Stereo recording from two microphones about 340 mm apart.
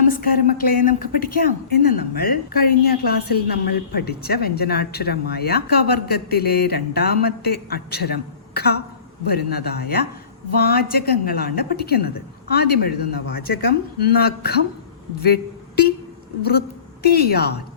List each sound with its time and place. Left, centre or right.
0.0 s a woman's voice: left